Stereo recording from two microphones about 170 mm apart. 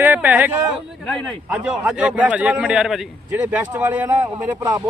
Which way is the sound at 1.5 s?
5° right (ahead or behind).